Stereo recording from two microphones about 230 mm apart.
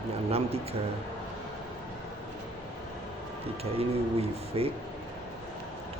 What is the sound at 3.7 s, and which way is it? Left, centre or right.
Speech, right.